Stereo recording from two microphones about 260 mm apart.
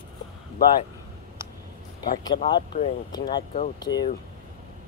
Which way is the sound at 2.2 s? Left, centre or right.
Centre.